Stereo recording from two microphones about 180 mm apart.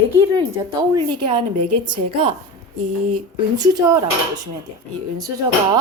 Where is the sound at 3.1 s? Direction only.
20° right (ahead or behind).